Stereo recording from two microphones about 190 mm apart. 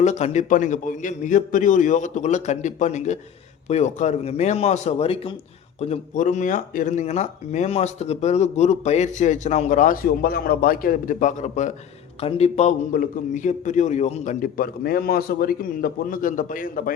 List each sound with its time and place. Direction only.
0.0 s speech: 35° left (ahead or behind)
12.9 s a man's voice: 45° left (ahead or behind)